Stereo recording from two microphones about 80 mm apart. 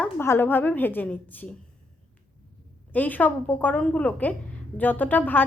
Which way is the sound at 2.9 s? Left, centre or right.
Left.